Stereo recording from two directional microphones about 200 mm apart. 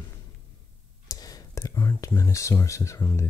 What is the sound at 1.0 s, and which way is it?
Speech, 20° left (ahead or behind).